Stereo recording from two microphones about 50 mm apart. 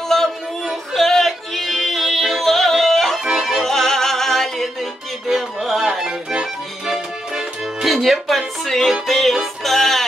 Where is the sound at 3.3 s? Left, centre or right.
Centre.